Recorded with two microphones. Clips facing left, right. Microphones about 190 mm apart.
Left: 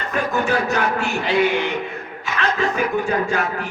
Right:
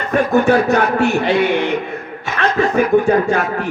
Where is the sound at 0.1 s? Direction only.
55° right (ahead or behind).